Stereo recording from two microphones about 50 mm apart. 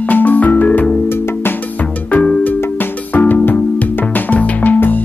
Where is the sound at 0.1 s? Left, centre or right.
Left.